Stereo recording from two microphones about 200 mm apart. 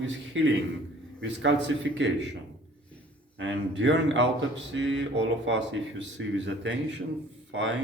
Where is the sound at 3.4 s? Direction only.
65° right (ahead or behind).